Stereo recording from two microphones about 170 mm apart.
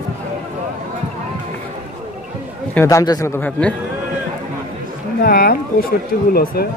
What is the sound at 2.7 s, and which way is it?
A man's voice, 15° left (ahead or behind).